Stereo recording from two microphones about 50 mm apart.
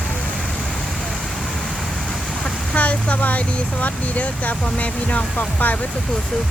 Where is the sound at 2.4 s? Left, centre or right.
Left.